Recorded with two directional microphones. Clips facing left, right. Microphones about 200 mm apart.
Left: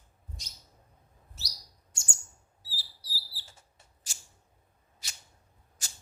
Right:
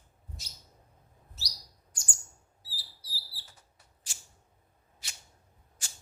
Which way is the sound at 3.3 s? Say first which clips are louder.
Left 1 dB; 25° left (ahead or behind).